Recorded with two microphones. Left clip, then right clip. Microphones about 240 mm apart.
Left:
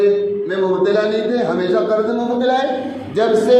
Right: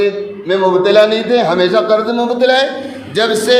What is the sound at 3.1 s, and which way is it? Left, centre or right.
Speech, right.